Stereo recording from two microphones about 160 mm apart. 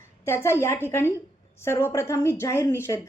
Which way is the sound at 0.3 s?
15° left (ahead or behind).